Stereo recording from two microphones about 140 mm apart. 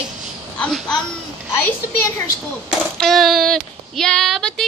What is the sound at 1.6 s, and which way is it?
Speech, 15° left (ahead or behind).